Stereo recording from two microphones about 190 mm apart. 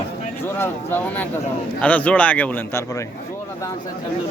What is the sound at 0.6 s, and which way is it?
Speech, 10° left (ahead or behind).